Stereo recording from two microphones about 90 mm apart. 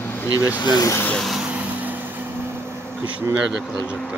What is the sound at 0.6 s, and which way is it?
Speech, 50° left (ahead or behind).